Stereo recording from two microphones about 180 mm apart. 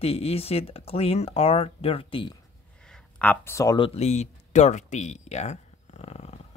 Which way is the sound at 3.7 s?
30° left (ahead or behind).